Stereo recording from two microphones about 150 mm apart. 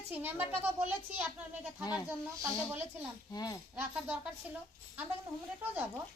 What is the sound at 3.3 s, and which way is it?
Speech, 25° left (ahead or behind).